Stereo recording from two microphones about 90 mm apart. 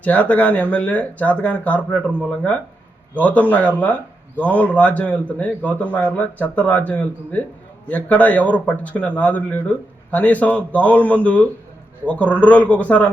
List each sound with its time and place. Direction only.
0.0 s a man's voice: 15° left (ahead or behind)